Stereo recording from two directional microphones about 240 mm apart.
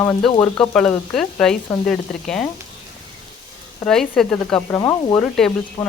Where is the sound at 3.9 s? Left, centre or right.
Centre.